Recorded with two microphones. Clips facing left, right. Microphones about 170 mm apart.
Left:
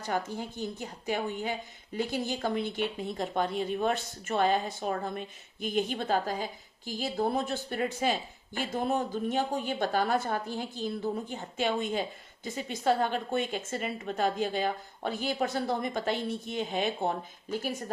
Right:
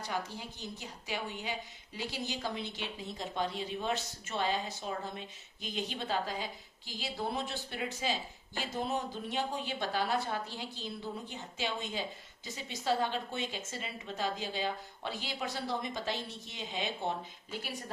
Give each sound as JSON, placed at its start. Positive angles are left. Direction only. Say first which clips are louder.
{"t": 0.0, "sound": "speech", "louder": "left 6 dB", "side_deg": 50}